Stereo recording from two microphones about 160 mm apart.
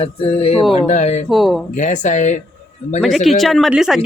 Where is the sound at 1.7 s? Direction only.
50° left (ahead or behind).